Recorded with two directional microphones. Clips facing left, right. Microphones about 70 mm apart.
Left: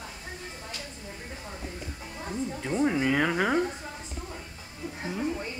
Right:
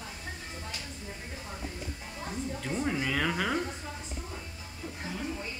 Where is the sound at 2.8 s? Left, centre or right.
Centre.